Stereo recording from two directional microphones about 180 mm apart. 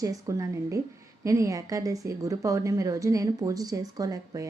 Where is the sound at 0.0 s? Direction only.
20° right (ahead or behind).